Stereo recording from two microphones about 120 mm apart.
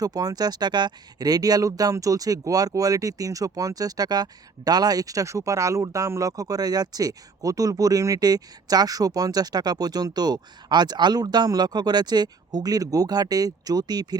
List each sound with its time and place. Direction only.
0.0 s speech: 30° right (ahead or behind)